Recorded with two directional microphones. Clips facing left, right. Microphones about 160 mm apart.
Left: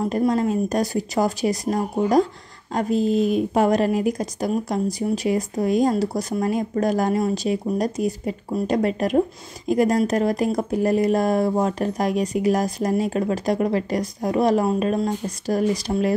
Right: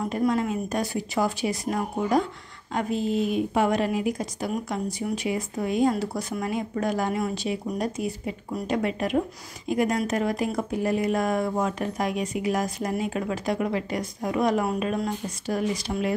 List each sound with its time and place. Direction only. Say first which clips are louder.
0.0 s speech: left 4 dB; 30° left (ahead or behind)